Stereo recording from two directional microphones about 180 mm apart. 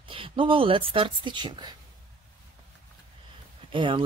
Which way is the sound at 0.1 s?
30° right (ahead or behind).